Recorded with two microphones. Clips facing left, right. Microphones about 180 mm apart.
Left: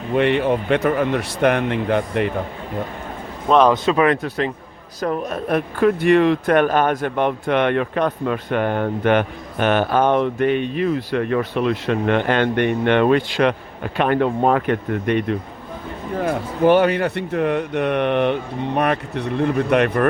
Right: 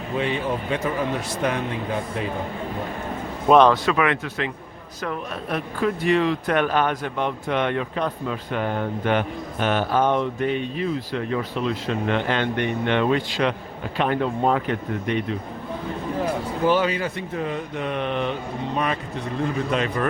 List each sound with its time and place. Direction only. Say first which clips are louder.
0.1 s speech: left 8 dB; 65° left (ahead or behind)
3.5 s speech: even; 10° right (ahead or behind)
3.9 s speech: left 5 dB; 35° left (ahead or behind); by 15.4 s 60° left (ahead or behind)
16.6 s speech: left 7 dB; 60° left (ahead or behind)